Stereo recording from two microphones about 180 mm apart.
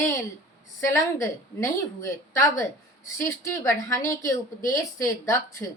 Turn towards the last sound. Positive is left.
turn(degrees=20)  # may be behind; listen again after turning